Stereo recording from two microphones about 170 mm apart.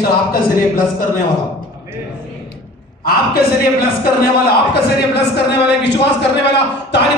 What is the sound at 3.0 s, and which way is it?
A man's voice, 65° left (ahead or behind).